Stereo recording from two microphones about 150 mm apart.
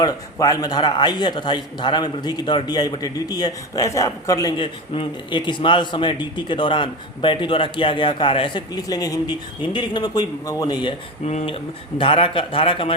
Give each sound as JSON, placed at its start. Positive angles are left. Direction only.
{"t": 0.0, "sound": "a man's voice", "side_deg": 25}
{"t": 4.5, "sound": "a man's voice", "side_deg": 35}
{"t": 11.3, "sound": "a man's voice", "side_deg": 45}